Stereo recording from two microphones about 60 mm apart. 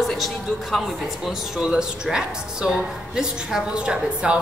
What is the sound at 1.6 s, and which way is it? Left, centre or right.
A woman's voice, centre.